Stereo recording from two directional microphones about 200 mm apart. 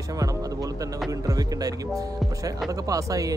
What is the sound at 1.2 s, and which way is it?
Speech, 15° right (ahead or behind).